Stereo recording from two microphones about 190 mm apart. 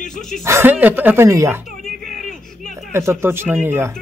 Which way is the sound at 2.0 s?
Centre (ahead or behind).